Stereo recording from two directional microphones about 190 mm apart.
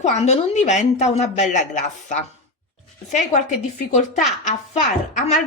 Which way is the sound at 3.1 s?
40° left (ahead or behind).